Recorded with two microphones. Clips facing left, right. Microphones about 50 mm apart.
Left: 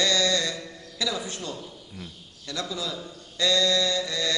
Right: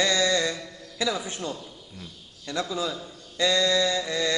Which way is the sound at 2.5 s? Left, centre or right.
Right.